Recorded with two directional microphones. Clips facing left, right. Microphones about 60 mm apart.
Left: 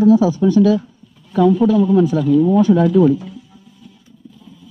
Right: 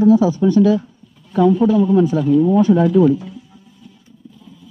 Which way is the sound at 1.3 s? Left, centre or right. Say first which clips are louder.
Even; right.